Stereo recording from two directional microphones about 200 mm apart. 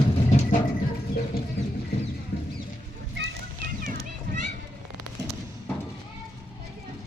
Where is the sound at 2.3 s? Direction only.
55° left (ahead or behind).